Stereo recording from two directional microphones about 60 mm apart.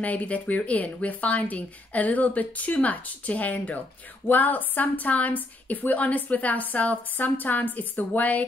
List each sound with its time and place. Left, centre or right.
0.0 s a woman's voice: left